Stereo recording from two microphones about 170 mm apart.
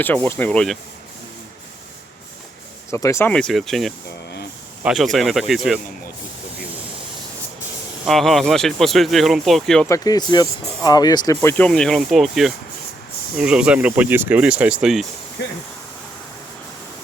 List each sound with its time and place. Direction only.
0.0 s speech: 10° left (ahead or behind)
2.9 s speech: 15° left (ahead or behind)
3.3 s speech: centre (ahead or behind)
8.0 s speech: centre (ahead or behind)
9.9 s speech: 20° left (ahead or behind)
11.4 s speech: 10° left (ahead or behind)